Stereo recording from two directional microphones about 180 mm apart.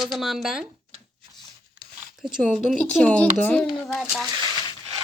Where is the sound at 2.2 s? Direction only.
5° right (ahead or behind).